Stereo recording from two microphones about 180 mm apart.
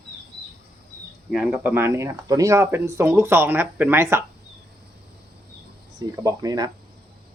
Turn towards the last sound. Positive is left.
turn(degrees=-20)  # may be behind; listen again after turning